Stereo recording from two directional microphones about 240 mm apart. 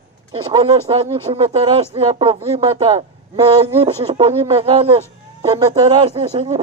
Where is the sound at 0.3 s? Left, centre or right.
Centre.